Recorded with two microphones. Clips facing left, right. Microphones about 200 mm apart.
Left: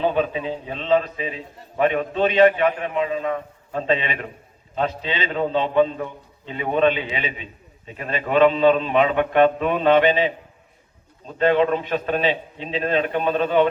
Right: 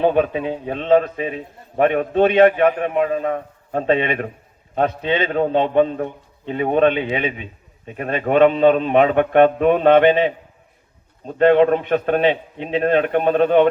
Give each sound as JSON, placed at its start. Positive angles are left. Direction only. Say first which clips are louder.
{"t": 0.0, "sound": "a man's voice", "louder": "right 4 dB", "side_deg": -55}